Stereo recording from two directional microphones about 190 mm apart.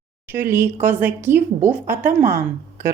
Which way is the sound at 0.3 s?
10° right (ahead or behind).